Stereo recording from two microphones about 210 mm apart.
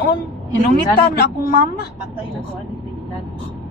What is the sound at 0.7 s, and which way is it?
A woman's voice, 45° left (ahead or behind).